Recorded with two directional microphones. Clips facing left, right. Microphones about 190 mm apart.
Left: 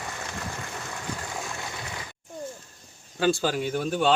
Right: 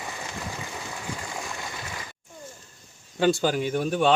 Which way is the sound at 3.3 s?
20° right (ahead or behind).